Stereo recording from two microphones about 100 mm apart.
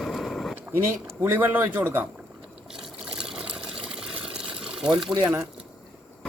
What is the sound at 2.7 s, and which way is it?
Water, 5° right (ahead or behind).